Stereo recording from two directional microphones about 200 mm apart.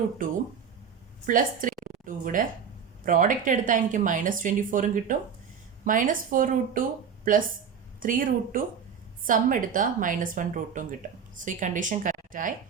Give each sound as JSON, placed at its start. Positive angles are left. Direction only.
{"t": 1.3, "sound": "a woman's voice", "side_deg": -40}
{"t": 1.8, "sound": "a sound", "side_deg": -40}
{"t": 3.0, "sound": "a woman's voice", "side_deg": -40}
{"t": 7.9, "sound": "a woman's voice", "side_deg": -45}